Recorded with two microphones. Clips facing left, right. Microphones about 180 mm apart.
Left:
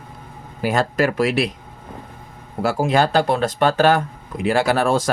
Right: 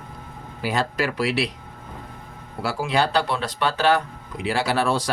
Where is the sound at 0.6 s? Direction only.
45° left (ahead or behind).